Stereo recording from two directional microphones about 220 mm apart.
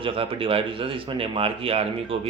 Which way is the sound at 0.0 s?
25° right (ahead or behind).